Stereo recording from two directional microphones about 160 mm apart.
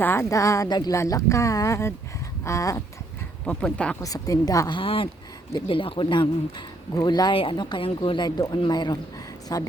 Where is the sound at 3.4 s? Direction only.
5° left (ahead or behind).